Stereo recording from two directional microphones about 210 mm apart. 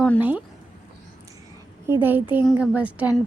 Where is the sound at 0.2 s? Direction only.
5° right (ahead or behind).